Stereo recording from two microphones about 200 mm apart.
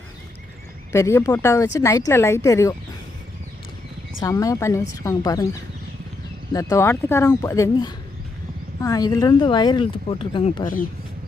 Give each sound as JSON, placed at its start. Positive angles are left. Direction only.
{"t": 0.9, "sound": "speech", "side_deg": 15}
{"t": 4.2, "sound": "speech", "side_deg": 15}
{"t": 6.5, "sound": "speech", "side_deg": 15}